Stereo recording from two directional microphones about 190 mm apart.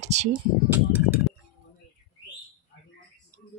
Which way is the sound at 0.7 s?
10° right (ahead or behind).